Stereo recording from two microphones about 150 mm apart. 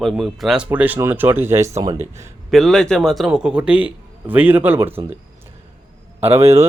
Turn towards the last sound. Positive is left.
turn(degrees=-20)  # may be behind; listen again after turning